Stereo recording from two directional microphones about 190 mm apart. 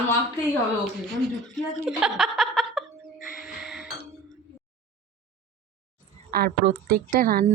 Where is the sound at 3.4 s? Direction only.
Centre (ahead or behind).